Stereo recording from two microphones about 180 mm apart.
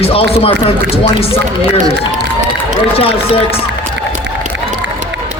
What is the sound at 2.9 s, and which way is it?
Speech, 30° left (ahead or behind).